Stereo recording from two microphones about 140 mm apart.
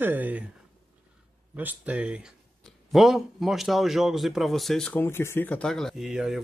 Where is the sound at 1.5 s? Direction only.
10° right (ahead or behind).